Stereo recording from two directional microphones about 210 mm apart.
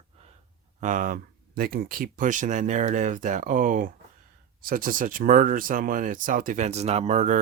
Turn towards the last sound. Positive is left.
turn(degrees=-35)  # may be behind; listen again after turning